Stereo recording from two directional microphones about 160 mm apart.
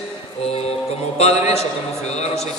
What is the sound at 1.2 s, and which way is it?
Speech, 40° left (ahead or behind).